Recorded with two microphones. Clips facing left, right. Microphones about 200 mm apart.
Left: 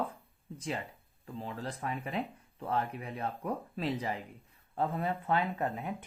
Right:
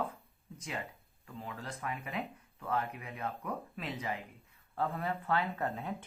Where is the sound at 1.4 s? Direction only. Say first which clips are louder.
Left 3 dB; 35° left (ahead or behind).